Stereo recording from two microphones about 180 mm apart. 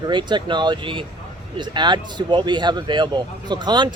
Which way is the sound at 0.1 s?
25° right (ahead or behind).